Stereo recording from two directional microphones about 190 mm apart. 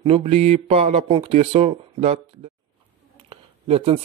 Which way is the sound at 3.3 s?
30° right (ahead or behind).